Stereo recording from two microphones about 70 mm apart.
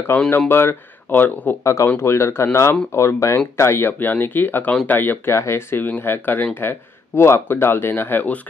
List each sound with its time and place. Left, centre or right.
0.5 s speech: left
1.6 s speech: left
5.3 s speech: left